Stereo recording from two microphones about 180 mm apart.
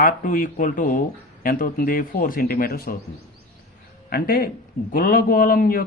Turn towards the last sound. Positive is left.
turn(degrees=55)  # may be behind; listen again after turning